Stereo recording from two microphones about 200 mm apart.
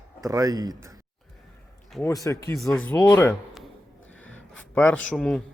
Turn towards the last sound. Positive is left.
turn(degrees=5)  # may be behind; listen again after turning